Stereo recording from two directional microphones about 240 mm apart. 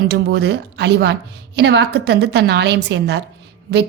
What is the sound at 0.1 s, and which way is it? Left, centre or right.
A woman's voice, right.